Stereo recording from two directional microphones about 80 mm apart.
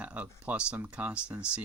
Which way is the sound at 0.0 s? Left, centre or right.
Centre.